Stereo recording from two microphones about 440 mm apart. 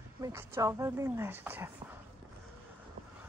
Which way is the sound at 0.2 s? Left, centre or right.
Centre.